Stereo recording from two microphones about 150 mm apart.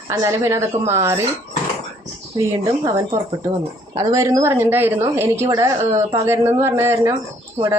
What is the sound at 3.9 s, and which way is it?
Speech, 20° right (ahead or behind).